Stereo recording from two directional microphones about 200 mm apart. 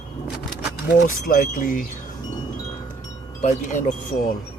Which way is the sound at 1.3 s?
45° left (ahead or behind).